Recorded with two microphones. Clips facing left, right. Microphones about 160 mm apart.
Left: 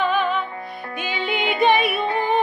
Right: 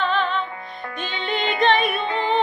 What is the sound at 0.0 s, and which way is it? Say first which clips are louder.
Music: left 2 dB; 10° left (ahead or behind).